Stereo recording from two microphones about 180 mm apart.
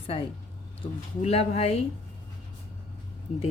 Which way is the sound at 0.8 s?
30° left (ahead or behind).